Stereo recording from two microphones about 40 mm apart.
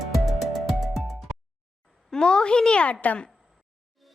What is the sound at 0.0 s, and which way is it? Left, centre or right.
Music, centre.